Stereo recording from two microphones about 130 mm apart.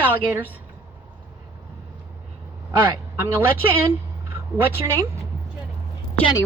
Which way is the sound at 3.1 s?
15° right (ahead or behind).